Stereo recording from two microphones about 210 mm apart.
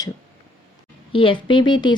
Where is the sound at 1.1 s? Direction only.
25° left (ahead or behind).